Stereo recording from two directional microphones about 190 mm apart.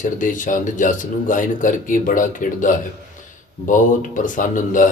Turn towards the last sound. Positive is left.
turn(degrees=45)  # may be behind; listen again after turning